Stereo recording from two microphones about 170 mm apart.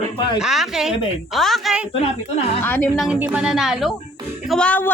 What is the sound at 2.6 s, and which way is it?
Speech, 10° left (ahead or behind).